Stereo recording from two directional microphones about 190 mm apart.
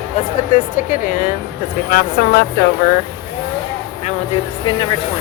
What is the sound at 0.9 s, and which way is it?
Speech, 45° left (ahead or behind).